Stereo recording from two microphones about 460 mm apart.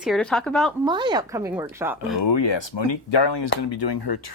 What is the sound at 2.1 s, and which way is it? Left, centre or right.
Speech, left.